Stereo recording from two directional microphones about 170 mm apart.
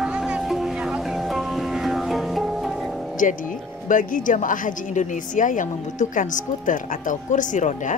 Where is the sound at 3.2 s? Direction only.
50° left (ahead or behind).